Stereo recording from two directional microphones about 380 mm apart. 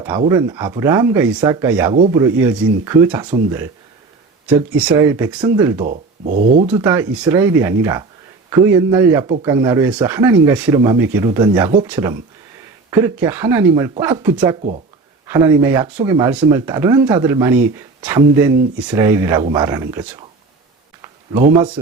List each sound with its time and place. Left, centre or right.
0.0 s speech: centre
4.4 s speech: centre
5.8 s speech: centre
6.7 s speech: centre